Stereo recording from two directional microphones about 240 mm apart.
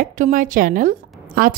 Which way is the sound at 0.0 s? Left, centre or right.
Right.